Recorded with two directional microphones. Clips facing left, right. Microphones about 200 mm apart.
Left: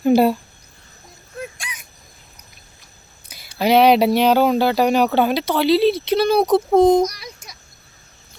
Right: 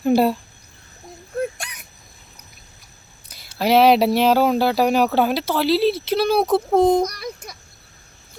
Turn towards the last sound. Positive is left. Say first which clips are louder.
# left 1 dB
turn(degrees=-55)  # may be behind; listen again after turning